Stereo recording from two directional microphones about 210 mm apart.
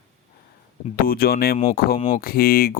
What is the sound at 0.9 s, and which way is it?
Speech, 45° left (ahead or behind).